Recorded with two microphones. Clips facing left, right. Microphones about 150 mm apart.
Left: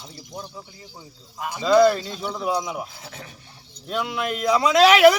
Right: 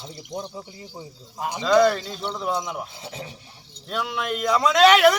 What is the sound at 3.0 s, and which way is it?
Speech, 25° right (ahead or behind).